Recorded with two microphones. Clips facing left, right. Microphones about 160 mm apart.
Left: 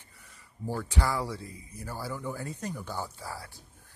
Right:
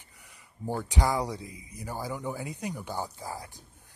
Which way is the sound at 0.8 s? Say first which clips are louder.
Right 3 dB; 15° right (ahead or behind).